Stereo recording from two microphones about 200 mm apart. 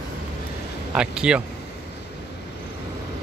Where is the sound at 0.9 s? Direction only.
5° right (ahead or behind).